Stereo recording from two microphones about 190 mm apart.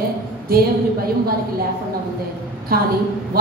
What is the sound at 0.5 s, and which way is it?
Speech, 50° right (ahead or behind).